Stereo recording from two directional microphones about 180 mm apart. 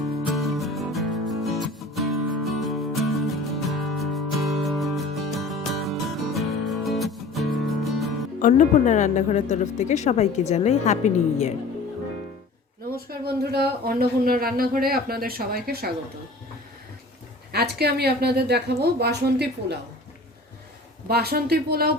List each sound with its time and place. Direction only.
0.3 s music: centre (ahead or behind)
8.4 s speech: 45° left (ahead or behind)
13.1 s speech: 60° right (ahead or behind)
17.5 s speech: 65° right (ahead or behind)
21.1 s speech: 60° right (ahead or behind)